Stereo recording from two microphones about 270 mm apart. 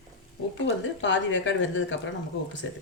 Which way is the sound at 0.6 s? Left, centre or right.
Left.